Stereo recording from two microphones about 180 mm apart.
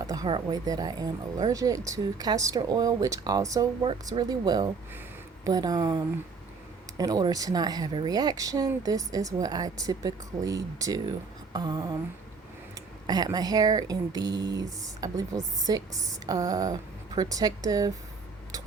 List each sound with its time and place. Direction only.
0.0 s speech: 20° right (ahead or behind)
13.1 s speech: 20° right (ahead or behind)